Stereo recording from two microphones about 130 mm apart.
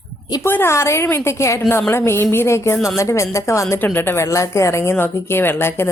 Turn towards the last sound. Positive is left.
turn(degrees=20)  # may be behind; listen again after turning